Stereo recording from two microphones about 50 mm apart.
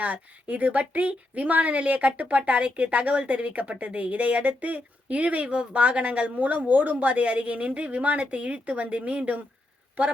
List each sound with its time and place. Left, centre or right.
0.0 s speech: right